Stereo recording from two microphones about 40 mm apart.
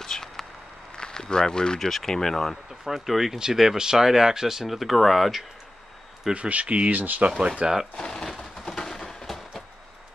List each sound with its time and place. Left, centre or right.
0.0 s a sound: centre
1.8 s speech: centre
2.8 s speech: centre
6.3 s speech: right
6.9 s speech: right
7.6 s speech: right
8.4 s a sound: centre